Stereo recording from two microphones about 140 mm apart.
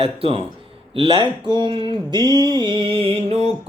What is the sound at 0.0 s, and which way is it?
Speech, 40° right (ahead or behind).